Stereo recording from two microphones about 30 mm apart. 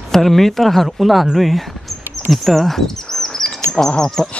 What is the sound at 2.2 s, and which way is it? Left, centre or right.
Bird, centre.